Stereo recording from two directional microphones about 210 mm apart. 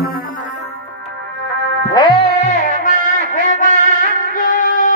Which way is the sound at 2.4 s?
40° left (ahead or behind).